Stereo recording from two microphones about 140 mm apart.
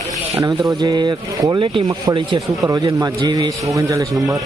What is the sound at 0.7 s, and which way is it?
Speech, 30° right (ahead or behind).